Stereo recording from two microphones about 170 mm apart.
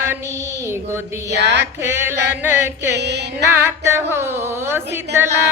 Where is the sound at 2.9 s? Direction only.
85° right.